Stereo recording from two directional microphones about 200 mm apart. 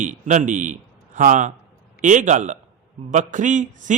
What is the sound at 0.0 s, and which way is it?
A man's voice, 40° right (ahead or behind).